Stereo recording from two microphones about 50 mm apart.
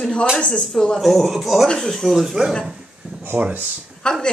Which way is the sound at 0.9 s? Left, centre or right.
Centre.